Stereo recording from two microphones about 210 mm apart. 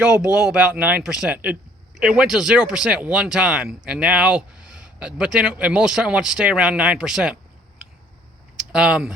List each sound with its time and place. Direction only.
0.0 s speech: 5° right (ahead or behind)
8.5 s speech: 5° right (ahead or behind)